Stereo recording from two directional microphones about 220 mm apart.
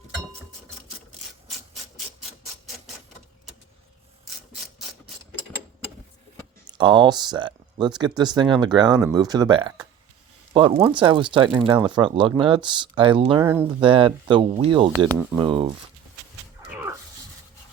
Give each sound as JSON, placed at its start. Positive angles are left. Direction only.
{"t": 6.7, "sound": "speech", "side_deg": -20}
{"t": 13.4, "sound": "speech", "side_deg": -10}
{"t": 13.7, "sound": "speech", "side_deg": -25}